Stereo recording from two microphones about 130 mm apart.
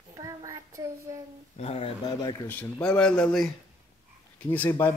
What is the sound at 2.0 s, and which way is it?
Speech, 30° left (ahead or behind).